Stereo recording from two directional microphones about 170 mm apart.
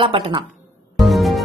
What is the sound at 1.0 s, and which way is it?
Music, centre (ahead or behind).